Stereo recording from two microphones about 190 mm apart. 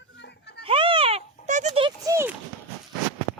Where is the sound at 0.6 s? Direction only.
30° right (ahead or behind).